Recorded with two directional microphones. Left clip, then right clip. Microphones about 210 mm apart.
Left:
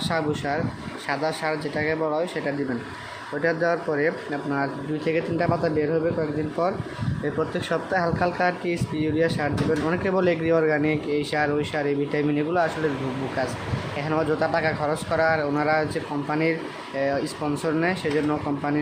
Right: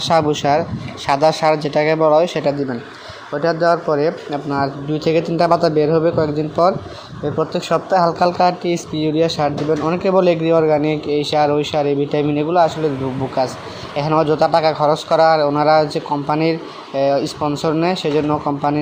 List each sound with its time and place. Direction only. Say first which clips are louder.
0.0 s speech: right 11 dB; 30° right (ahead or behind)
3.3 s speech: right 8 dB; 15° right (ahead or behind)
12.6 s speech: right 7 dB; centre (ahead or behind)
13.9 s speech: right 9 dB; 20° right (ahead or behind)